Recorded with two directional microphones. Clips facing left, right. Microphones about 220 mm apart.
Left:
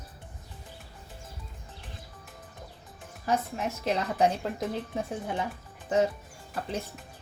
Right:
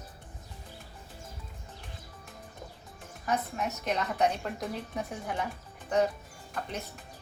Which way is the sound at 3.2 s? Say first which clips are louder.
Left 2 dB; 30° left (ahead or behind).